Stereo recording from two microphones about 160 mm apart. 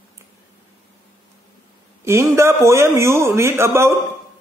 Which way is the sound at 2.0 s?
15° right (ahead or behind).